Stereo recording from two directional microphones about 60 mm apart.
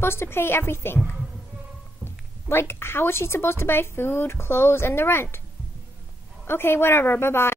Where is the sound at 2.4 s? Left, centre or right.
Left.